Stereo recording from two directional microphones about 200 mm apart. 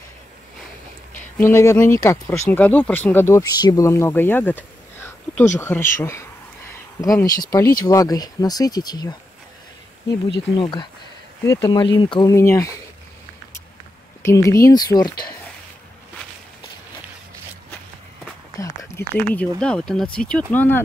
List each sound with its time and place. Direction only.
1.4 s speech: 15° left (ahead or behind)
5.9 s a sound: 15° left (ahead or behind)
7.5 s speech: 20° left (ahead or behind)
10.5 s speech: 25° left (ahead or behind)
14.2 s speech: 15° left (ahead or behind)
18.6 s speech: 15° left (ahead or behind)